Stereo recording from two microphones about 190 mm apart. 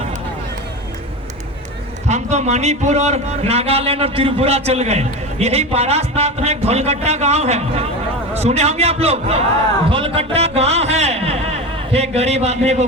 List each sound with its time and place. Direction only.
2.0 s a man's voice: 35° right (ahead or behind)